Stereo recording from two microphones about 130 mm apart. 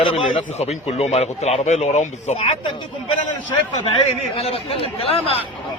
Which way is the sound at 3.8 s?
45° left (ahead or behind).